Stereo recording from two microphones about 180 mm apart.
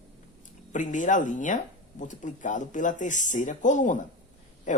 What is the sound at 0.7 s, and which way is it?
Speech, 45° left (ahead or behind).